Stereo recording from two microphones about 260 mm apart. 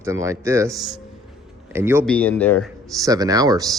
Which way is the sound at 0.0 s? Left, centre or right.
Centre.